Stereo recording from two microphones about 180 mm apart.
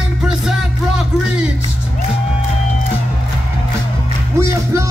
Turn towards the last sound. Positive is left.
turn(degrees=-15)  # may be behind; listen again after turning